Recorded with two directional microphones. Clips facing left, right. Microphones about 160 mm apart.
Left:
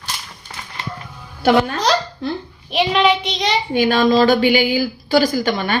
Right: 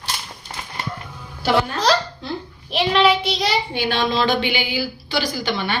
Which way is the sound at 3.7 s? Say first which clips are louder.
Left 7 dB; 45° left (ahead or behind).